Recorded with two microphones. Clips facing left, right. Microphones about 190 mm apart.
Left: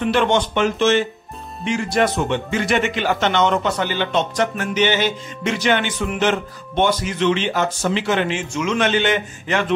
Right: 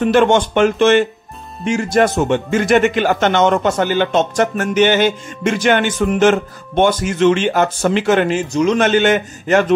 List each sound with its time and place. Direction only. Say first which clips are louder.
0.0 s speech: right 5 dB; 45° right (ahead or behind)
1.6 s speech: right 4 dB; 45° right (ahead or behind)